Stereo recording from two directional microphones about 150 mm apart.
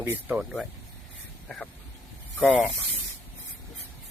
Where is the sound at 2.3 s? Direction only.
10° left (ahead or behind).